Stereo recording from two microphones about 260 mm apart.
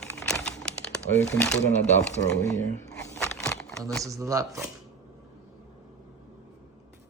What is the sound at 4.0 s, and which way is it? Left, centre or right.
Speech, centre.